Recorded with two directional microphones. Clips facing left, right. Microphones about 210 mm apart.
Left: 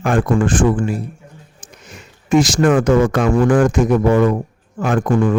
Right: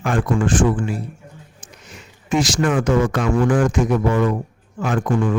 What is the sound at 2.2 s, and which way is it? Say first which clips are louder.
Speech: left 5 dB; 45° left (ahead or behind).